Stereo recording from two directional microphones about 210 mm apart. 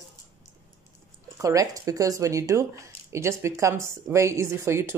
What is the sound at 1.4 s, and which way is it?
Speech, 15° right (ahead or behind).